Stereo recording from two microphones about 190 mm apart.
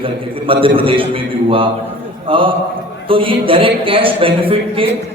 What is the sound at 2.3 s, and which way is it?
A man's voice, 25° right (ahead or behind).